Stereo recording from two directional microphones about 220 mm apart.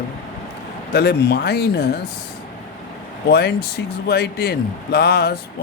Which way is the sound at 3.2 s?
50° left (ahead or behind).